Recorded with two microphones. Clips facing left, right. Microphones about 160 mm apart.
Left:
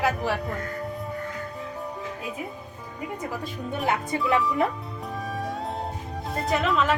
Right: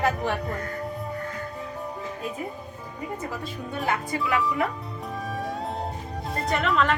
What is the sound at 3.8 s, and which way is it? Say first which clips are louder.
Music: left 1 dB; 20° left (ahead or behind).